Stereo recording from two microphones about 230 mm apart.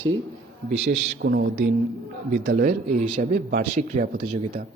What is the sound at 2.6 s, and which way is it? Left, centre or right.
A man's voice, right.